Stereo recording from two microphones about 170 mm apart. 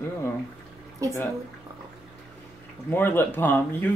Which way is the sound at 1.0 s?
20° right (ahead or behind).